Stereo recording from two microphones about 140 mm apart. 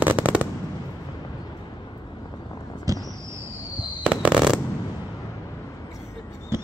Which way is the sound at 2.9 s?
25° right (ahead or behind).